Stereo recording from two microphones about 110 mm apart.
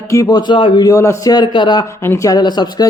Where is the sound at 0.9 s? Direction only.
25° left (ahead or behind).